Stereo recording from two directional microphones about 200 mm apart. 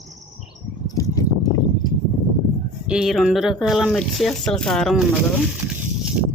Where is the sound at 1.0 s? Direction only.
15° left (ahead or behind).